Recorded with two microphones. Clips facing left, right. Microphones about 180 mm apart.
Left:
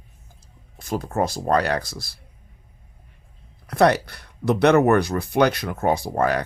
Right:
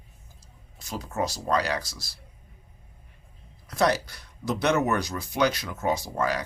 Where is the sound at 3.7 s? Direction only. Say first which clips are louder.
Left 6 dB; 60° left (ahead or behind).